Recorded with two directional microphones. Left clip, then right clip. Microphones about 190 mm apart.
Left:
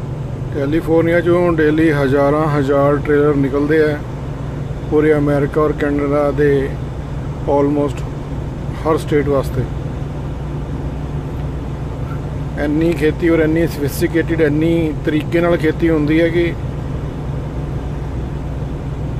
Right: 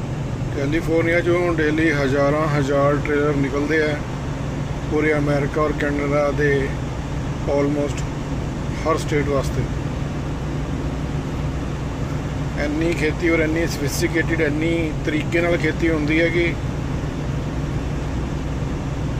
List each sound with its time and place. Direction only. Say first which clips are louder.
0.6 s speech: left 6 dB; 40° left (ahead or behind)
8.8 s speech: left 5 dB; 35° left (ahead or behind)
12.5 s speech: left 6 dB; 40° left (ahead or behind)